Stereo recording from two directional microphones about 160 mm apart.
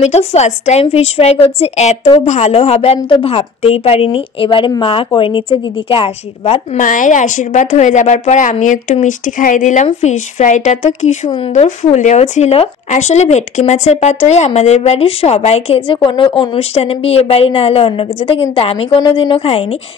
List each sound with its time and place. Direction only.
0.0 s a woman's voice: 40° left (ahead or behind)
11.2 s speech: 35° left (ahead or behind)
11.9 s speech: 45° left (ahead or behind)